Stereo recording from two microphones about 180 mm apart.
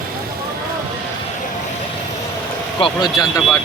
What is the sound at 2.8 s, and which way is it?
Speech, 25° left (ahead or behind).